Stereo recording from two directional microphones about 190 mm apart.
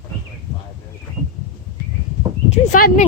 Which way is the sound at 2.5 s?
45° left (ahead or behind).